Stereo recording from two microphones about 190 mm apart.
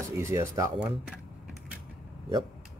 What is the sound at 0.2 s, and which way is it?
Speech, 15° right (ahead or behind).